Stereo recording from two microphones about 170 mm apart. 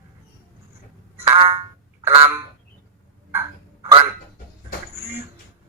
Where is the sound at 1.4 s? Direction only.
30° right (ahead or behind).